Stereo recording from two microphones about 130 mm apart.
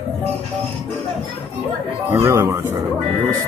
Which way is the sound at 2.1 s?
20° right (ahead or behind).